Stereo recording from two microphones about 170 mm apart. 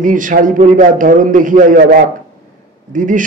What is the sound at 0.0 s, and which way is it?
A man's voice, 50° right (ahead or behind).